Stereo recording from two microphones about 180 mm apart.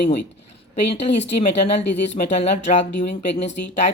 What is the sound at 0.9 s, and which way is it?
Speech, 35° left (ahead or behind).